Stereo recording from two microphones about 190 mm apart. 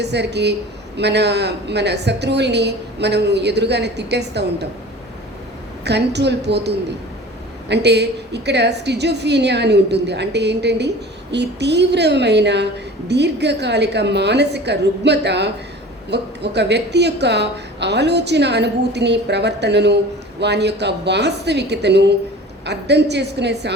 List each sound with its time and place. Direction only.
0.0 s a woman's voice: 60° right (ahead or behind)
5.8 s a woman's voice: 65° right (ahead or behind)